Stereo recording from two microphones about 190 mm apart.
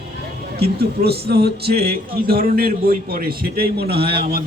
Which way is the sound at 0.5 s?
55° right (ahead or behind).